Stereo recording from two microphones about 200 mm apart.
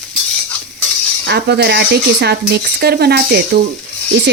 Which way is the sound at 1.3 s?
55° right (ahead or behind).